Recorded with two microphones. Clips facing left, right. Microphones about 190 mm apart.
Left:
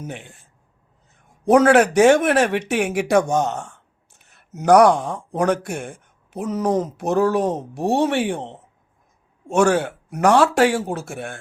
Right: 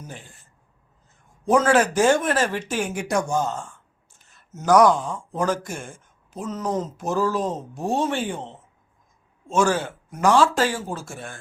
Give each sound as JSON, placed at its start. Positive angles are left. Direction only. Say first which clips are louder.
{"t": 0.1, "sound": "speech", "louder": "left 6 dB", "side_deg": 70}
{"t": 9.5, "sound": "speech", "louder": "left 4 dB", "side_deg": 65}